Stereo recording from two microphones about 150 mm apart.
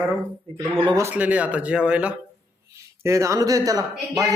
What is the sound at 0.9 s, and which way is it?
A man's voice, 15° right (ahead or behind).